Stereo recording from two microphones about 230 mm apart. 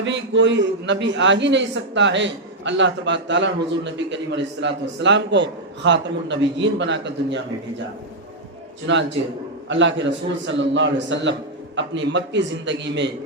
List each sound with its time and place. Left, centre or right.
0.0 s a man's voice: right
8.9 s a man's voice: right